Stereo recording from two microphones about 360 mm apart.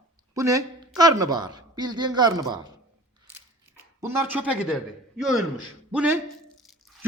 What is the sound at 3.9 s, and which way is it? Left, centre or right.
A man's voice, centre.